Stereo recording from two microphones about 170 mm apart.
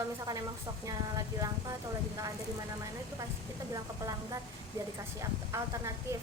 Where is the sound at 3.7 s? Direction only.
20° right (ahead or behind).